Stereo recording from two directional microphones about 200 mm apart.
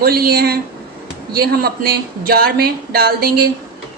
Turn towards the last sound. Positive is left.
turn(degrees=-50)  # may be behind; listen again after turning